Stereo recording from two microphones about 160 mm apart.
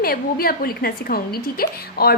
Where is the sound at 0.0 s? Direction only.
70° left (ahead or behind).